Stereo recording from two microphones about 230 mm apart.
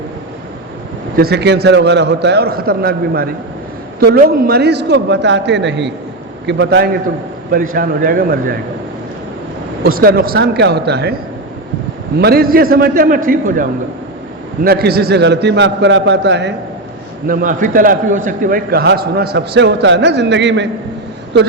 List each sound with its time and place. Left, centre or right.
1.1 s a man's voice: right
9.8 s a man's voice: right
12.2 s a man's voice: right
17.2 s a man's voice: right